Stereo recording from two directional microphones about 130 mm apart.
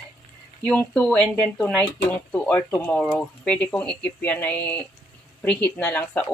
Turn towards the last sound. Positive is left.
turn(degrees=15)  # may be behind; listen again after turning